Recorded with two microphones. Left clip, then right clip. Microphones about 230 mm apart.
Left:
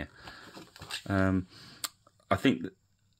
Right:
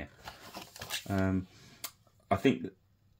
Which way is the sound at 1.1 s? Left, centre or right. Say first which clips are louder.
Left 5 dB; left.